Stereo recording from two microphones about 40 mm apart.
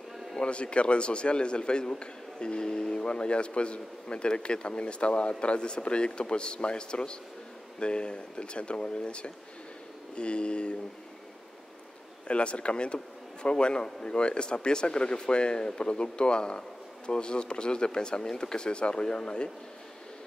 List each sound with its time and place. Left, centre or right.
0.4 s speech: left
12.3 s speech: left